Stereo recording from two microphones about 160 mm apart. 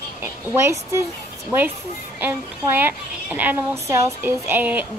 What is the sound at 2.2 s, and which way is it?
A child's voice, 10° right (ahead or behind).